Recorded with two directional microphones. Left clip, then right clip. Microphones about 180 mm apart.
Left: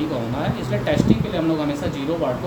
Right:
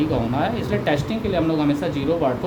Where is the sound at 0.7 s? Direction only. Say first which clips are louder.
Left 1 dB; 55° right (ahead or behind).